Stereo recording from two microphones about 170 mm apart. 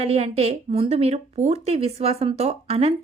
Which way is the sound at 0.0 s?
40° right (ahead or behind).